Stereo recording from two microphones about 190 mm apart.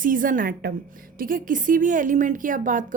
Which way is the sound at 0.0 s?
45° right (ahead or behind).